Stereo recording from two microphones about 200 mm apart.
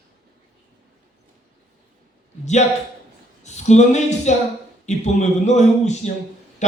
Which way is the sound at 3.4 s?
35° left (ahead or behind).